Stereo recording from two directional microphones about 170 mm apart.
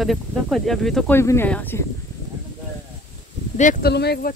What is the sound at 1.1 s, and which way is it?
Speech, 15° left (ahead or behind).